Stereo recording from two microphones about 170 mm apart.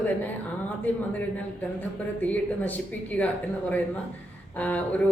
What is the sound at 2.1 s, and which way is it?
Speech, 10° left (ahead or behind).